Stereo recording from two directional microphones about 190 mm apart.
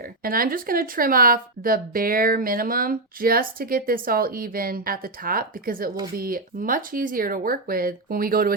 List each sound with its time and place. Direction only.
0.2 s a woman's voice: 50° right (ahead or behind)